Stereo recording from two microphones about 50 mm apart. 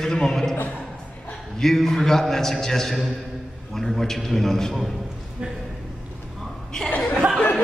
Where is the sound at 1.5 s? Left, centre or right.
Centre.